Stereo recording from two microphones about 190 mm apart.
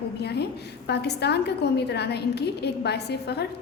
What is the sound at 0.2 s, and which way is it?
A woman's voice, 60° left (ahead or behind).